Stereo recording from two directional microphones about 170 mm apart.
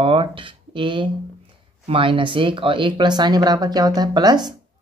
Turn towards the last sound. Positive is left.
turn(degrees=-25)  # may be behind; listen again after turning